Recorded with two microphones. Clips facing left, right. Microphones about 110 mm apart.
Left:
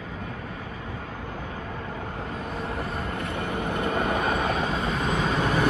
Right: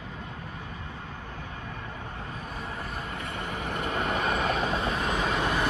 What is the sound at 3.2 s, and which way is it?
Vehicle, 65° left (ahead or behind).